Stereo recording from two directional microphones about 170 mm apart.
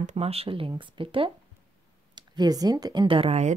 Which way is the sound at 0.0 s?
35° right (ahead or behind).